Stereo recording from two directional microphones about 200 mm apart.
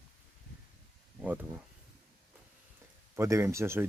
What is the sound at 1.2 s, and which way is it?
Speech, 10° right (ahead or behind).